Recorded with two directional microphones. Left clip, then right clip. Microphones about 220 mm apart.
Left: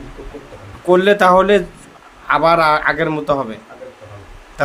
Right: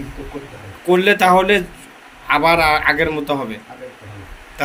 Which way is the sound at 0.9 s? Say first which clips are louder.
Left 2 dB; 30° left (ahead or behind).